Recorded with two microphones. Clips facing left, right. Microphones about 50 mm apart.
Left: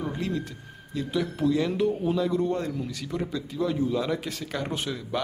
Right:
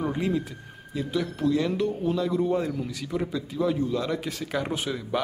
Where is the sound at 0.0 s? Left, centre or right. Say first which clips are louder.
Right 4 dB; centre.